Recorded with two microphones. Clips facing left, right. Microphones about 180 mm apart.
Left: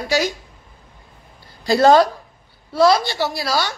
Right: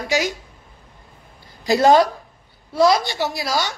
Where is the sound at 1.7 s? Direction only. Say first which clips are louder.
Left 1 dB; 15° right (ahead or behind).